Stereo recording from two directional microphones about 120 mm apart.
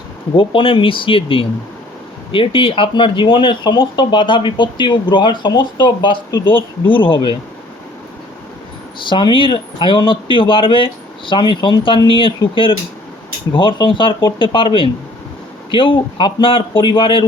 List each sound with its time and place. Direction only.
0.3 s speech: 45° left (ahead or behind)
9.0 s speech: 40° left (ahead or behind)